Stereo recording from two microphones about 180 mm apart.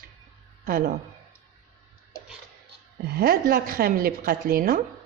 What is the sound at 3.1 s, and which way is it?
A woman's voice, 60° right (ahead or behind).